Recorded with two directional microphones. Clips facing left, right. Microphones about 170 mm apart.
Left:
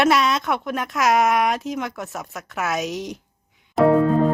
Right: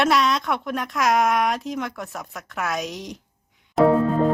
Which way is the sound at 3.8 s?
Centre (ahead or behind).